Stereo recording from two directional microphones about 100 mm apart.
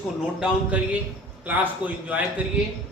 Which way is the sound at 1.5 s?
15° right (ahead or behind).